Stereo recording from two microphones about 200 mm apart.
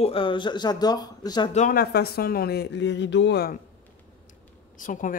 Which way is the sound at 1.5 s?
45° left (ahead or behind).